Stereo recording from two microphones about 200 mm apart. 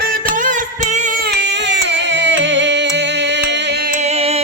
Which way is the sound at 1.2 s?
55° right (ahead or behind).